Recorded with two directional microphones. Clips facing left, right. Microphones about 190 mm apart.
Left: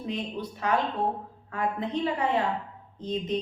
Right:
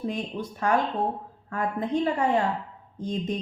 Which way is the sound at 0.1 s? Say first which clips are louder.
Right 1 dB; 45° right (ahead or behind).